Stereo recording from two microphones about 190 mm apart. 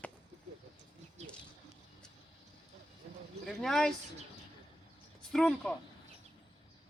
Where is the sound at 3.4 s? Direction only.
Centre (ahead or behind).